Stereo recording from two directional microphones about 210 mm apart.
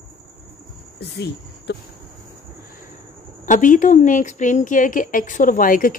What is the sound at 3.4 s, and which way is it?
A woman's voice, 35° left (ahead or behind).